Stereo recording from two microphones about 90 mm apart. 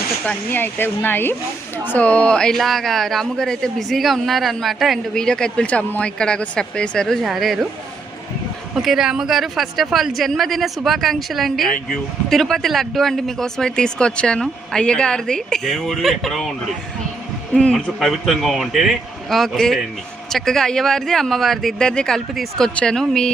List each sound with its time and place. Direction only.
0.3 s speech: 20° left (ahead or behind); by 7.7 s centre (ahead or behind)
8.7 s speech: 5° right (ahead or behind)
17.5 s speech: 5° left (ahead or behind)